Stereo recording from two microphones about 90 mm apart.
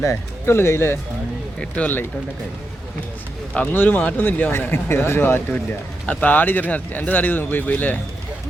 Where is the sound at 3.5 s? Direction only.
20° left (ahead or behind).